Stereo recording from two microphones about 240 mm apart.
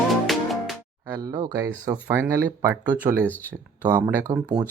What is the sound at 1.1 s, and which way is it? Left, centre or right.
Speech, centre.